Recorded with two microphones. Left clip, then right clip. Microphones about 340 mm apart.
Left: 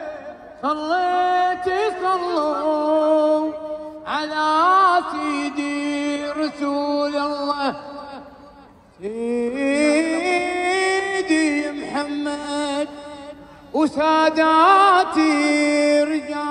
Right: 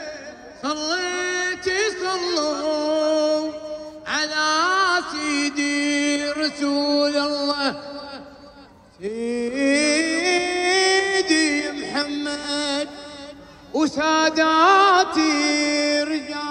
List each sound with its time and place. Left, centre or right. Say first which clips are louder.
0.6 s a sound: left 4 dB; centre
4.1 s mantra: left 1 dB; centre
9.0 s mantra: left 2 dB; centre
13.7 s music: left 2 dB; centre